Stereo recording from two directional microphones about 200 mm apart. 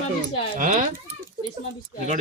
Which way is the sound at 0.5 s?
40° right (ahead or behind).